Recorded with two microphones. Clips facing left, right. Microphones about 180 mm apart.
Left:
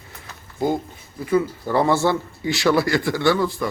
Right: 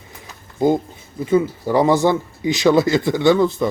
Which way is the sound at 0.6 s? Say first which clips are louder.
Right 5 dB; 20° right (ahead or behind).